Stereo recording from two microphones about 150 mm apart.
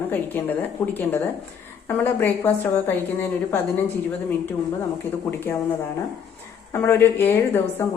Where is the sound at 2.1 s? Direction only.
10° left (ahead or behind).